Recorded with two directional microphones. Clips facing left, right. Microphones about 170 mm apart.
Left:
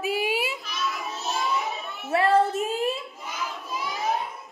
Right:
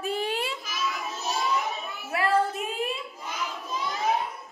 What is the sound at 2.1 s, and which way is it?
Child singing, 30° left (ahead or behind).